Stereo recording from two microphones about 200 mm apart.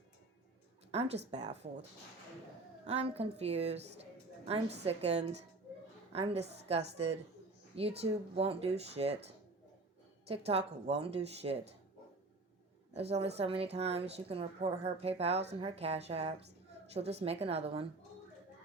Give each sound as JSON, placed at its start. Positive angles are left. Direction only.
{"t": 0.9, "sound": "a woman's voice", "side_deg": -30}
{"t": 2.8, "sound": "a woman's voice", "side_deg": -30}
{"t": 12.9, "sound": "a woman's voice", "side_deg": -30}